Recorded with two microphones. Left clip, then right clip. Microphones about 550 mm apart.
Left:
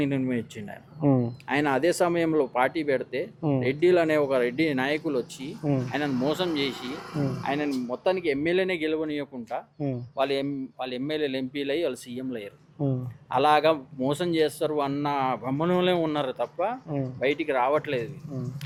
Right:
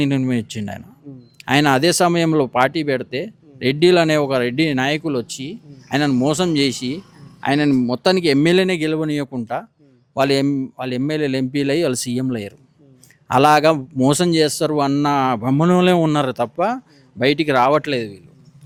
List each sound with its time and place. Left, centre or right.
0.0 s speech: right